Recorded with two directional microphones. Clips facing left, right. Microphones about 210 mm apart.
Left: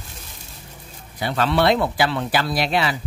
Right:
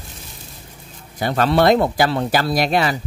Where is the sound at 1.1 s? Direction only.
45° right (ahead or behind).